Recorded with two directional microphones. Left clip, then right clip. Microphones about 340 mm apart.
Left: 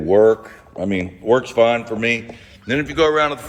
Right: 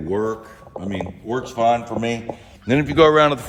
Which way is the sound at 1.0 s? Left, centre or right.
Centre.